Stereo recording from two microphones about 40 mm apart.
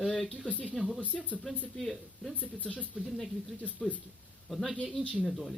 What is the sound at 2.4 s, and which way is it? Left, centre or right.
Speech, left.